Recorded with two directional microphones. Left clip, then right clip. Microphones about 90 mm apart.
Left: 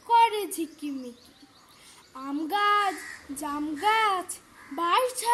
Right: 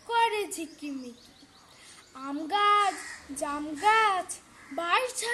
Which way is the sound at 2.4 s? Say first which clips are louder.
Even; 20° right (ahead or behind).